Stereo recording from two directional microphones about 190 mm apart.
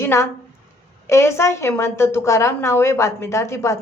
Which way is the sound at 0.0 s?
15° left (ahead or behind).